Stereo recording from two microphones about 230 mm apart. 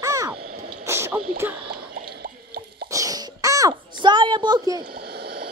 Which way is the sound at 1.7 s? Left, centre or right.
Right.